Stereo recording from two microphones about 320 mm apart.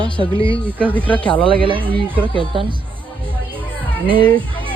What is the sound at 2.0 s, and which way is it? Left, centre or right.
Speech, centre.